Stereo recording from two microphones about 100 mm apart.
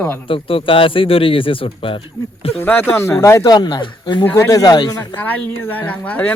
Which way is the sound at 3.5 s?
45° left (ahead or behind).